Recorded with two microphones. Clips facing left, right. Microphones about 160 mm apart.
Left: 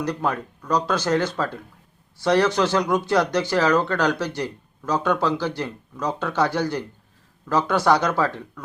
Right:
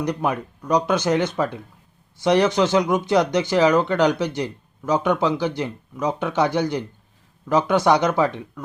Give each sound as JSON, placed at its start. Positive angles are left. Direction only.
{"t": 0.0, "sound": "speech", "side_deg": -15}